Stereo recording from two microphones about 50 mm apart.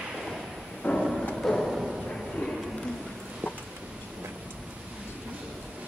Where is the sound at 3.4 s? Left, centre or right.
Right.